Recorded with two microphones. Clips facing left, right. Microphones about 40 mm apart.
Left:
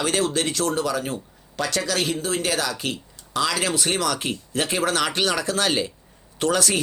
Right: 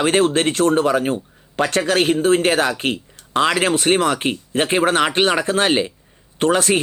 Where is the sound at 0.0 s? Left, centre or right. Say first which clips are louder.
Right 7 dB; right.